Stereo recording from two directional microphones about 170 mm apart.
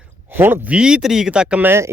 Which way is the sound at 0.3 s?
10° right (ahead or behind).